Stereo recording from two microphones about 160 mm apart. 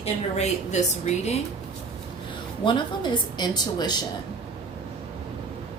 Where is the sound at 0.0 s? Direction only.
45° left (ahead or behind).